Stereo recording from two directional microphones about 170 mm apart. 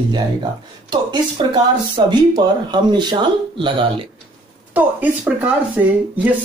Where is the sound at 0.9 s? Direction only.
25° right (ahead or behind).